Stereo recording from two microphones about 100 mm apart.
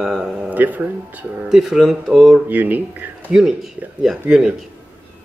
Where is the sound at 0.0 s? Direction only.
5° right (ahead or behind).